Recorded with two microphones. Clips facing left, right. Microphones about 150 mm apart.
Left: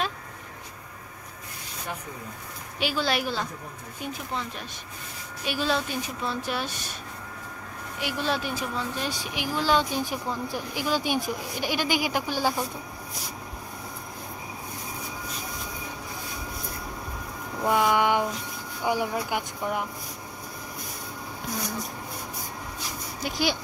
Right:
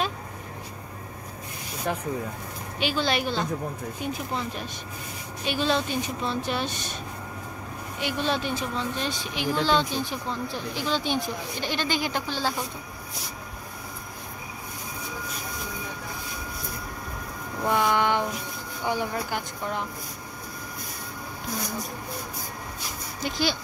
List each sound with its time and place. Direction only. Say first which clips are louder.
1.9 s speech: right 7 dB; 90° right
2.8 s speech: right 1 dB; 5° left (ahead or behind)
8.0 s speech: right 1 dB; 5° left (ahead or behind)
17.6 s a sound: left 1 dB; 5° left (ahead or behind)
18.9 s speech: left 1 dB; 10° left (ahead or behind)
23.2 s speech: even; 15° left (ahead or behind)